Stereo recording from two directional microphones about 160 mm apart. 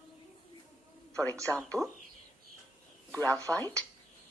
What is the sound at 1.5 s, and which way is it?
Speech, 5° left (ahead or behind).